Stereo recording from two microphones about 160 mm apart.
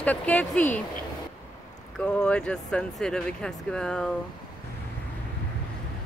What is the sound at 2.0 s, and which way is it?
Speech, 5° left (ahead or behind).